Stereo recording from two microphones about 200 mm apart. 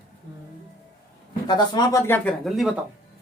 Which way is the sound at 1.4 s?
20° left (ahead or behind).